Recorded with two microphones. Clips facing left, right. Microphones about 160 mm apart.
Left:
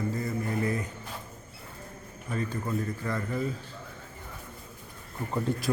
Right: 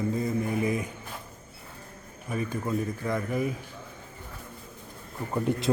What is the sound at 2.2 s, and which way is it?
A man's voice, 15° right (ahead or behind).